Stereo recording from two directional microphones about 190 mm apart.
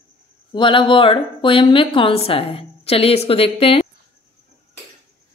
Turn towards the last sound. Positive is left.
turn(degrees=30)  # may be behind; listen again after turning